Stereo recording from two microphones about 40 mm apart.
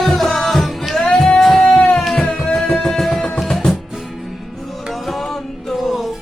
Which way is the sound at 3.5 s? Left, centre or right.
Centre.